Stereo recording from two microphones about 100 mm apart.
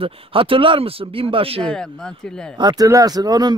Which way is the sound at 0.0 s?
65° right (ahead or behind).